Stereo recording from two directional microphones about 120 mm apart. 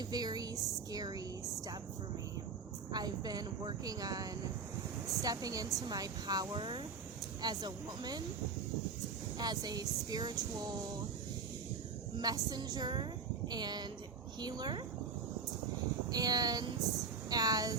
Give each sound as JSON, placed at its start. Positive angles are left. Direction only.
{"t": 0.0, "sound": "speech", "side_deg": -35}
{"t": 2.9, "sound": "speech", "side_deg": -35}
{"t": 9.4, "sound": "speech", "side_deg": -35}
{"t": 12.1, "sound": "speech", "side_deg": -35}
{"t": 16.0, "sound": "speech", "side_deg": -30}